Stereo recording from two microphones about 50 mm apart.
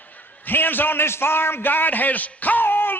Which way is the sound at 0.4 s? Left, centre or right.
Left.